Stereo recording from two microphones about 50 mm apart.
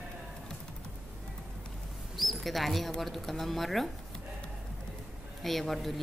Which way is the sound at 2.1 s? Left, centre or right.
Centre.